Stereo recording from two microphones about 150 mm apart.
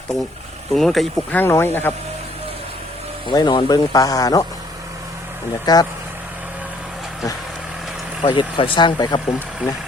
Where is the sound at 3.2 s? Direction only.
30° left (ahead or behind).